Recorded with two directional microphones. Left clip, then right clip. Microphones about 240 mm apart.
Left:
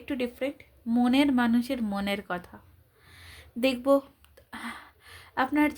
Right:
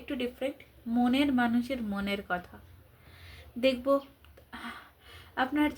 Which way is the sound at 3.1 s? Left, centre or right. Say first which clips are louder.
Left 4 dB; left.